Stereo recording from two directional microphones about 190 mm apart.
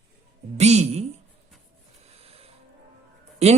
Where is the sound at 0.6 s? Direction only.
35° right (ahead or behind).